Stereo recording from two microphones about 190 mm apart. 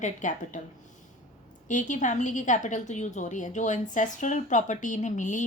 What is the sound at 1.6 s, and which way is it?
A woman's voice, 40° left (ahead or behind).